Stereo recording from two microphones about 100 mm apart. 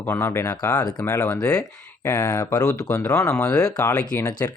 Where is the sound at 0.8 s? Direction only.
45° left (ahead or behind).